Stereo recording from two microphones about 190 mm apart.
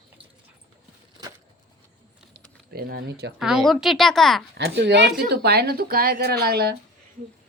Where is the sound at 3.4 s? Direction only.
Centre (ahead or behind).